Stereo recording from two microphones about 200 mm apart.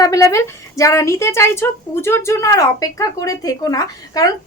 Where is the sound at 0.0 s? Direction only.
15° left (ahead or behind).